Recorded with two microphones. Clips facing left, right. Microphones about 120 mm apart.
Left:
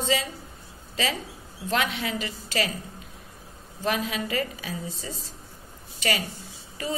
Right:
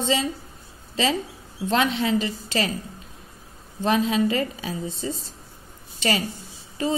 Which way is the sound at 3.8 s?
30° right (ahead or behind).